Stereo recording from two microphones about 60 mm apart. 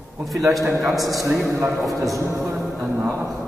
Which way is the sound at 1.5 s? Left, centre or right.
Right.